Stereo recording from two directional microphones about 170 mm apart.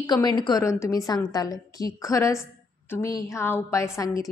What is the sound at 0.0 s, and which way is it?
A woman's voice, 25° left (ahead or behind).